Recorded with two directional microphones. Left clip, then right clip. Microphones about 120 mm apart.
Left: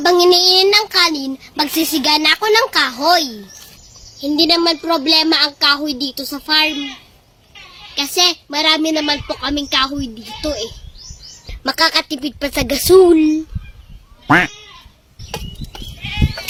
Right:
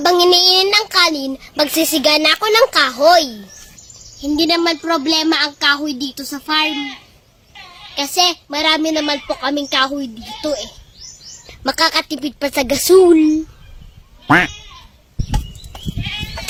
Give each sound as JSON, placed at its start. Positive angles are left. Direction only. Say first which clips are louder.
{"t": 0.0, "sound": "a child's voice", "louder": "even", "side_deg": -30}
{"t": 4.2, "sound": "speech", "louder": "left 2 dB", "side_deg": 0}
{"t": 7.9, "sound": "a woman's voice", "louder": "even", "side_deg": -10}
{"t": 11.6, "sound": "a woman's voice", "louder": "left 1 dB", "side_deg": -15}